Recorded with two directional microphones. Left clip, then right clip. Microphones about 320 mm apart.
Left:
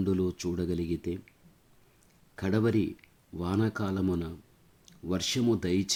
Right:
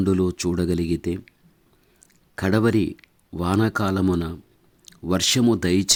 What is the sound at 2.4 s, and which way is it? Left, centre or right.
Speech, right.